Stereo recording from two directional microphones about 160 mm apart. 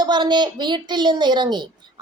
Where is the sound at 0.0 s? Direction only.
30° right (ahead or behind).